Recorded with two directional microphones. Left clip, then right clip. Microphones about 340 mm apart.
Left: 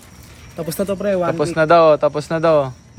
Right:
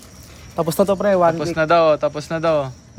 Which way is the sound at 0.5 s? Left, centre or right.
Centre.